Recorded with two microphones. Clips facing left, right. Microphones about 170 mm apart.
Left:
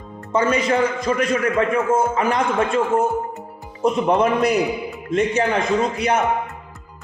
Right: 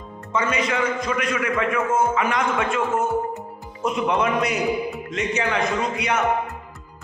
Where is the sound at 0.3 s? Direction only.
35° left (ahead or behind).